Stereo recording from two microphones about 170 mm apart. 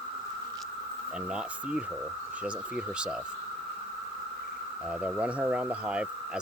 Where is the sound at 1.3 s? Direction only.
5° right (ahead or behind).